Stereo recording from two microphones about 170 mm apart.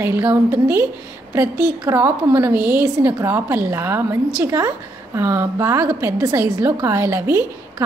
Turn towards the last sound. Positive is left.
turn(degrees=-15)  # may be behind; listen again after turning